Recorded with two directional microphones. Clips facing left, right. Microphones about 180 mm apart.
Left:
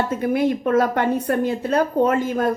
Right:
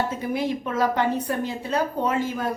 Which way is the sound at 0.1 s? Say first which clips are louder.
Left 6 dB; 55° left (ahead or behind).